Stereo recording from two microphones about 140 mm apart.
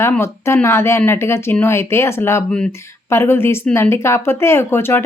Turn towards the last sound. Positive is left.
turn(degrees=15)  # may be behind; listen again after turning